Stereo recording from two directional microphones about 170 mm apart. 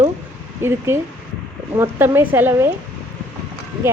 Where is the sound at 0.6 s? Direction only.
15° right (ahead or behind).